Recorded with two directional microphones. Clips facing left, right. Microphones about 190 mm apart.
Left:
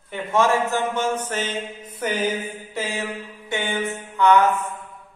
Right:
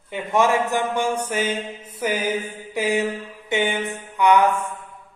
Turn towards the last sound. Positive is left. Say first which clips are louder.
# even
turn(degrees=-15)  # may be behind; listen again after turning